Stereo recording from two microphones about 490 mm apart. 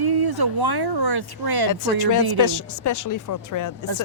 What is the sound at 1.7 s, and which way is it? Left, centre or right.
A woman's voice, left.